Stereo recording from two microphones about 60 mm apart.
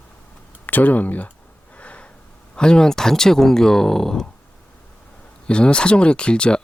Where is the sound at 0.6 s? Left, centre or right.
Left.